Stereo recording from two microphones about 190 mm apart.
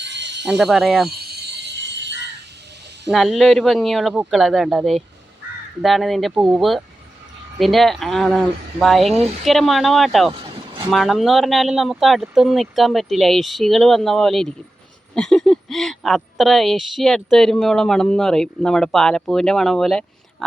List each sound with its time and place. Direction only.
0.0 s a sound: 65° right (ahead or behind)
0.4 s a woman's voice: 5° right (ahead or behind)
1.2 s music: 55° right (ahead or behind)
3.1 s a woman's voice: centre (ahead or behind)